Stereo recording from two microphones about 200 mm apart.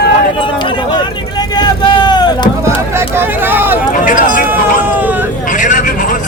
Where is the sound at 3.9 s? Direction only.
40° left (ahead or behind).